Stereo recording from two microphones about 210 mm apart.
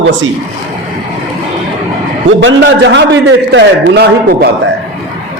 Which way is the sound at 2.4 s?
60° right (ahead or behind).